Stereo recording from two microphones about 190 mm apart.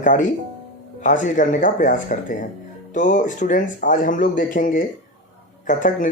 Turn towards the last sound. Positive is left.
turn(degrees=45)  # may be behind; listen again after turning